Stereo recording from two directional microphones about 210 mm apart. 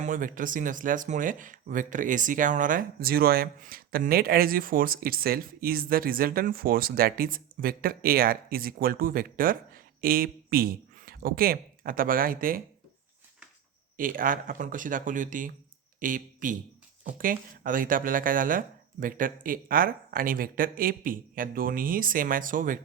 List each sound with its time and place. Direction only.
0.0 s speech: 40° right (ahead or behind)
13.9 s speech: 40° right (ahead or behind)